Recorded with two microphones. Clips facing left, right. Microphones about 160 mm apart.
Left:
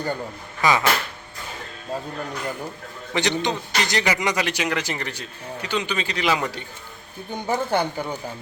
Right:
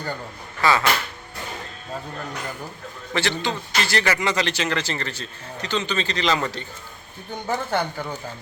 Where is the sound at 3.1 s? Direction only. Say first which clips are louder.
Left 2 dB; 15° left (ahead or behind).